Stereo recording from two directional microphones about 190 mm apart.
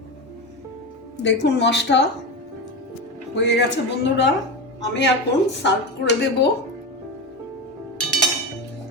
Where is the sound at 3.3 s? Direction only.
65° left (ahead or behind).